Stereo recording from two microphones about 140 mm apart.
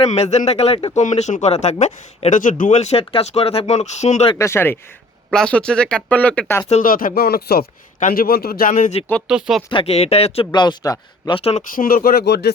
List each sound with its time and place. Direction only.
0.0 s speech: 50° left (ahead or behind)
1.0 s speech: 60° left (ahead or behind)
4.4 s speech: 20° left (ahead or behind)
5.3 s speech: 5° left (ahead or behind)
6.8 s a man's voice: 90° left
7.9 s a man's voice: 75° left (ahead or behind)
8.7 s speech: 50° left (ahead or behind)
9.2 s speech: 5° right (ahead or behind)
9.6 s speech: 40° left (ahead or behind)
11.3 s speech: 45° left (ahead or behind)
11.6 s a man's voice: 85° left